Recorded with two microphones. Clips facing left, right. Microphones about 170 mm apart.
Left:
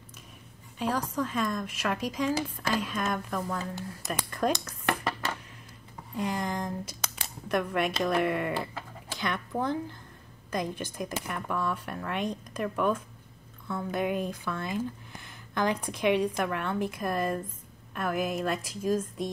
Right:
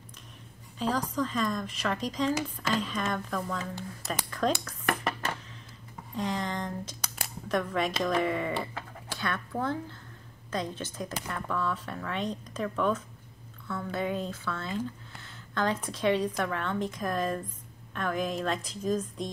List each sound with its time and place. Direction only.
0.7 s a woman's voice: 10° left (ahead or behind)
6.1 s speech: 10° left (ahead or behind)